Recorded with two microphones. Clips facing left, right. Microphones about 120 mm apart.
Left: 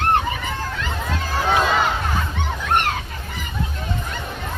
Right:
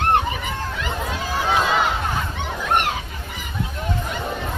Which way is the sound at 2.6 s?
5° right (ahead or behind).